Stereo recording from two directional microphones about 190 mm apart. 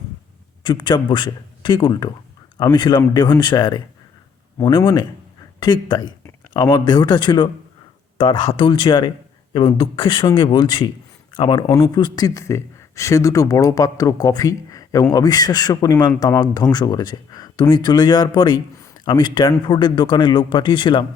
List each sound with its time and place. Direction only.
0.6 s a man's voice: 25° left (ahead or behind)